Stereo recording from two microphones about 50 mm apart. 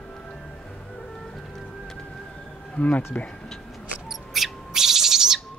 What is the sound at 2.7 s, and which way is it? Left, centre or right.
Speech, left.